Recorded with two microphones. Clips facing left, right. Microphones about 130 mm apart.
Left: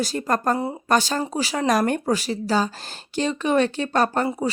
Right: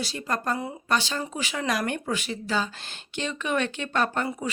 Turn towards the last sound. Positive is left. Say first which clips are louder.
# left 5 dB
turn(degrees=35)  # may be behind; listen again after turning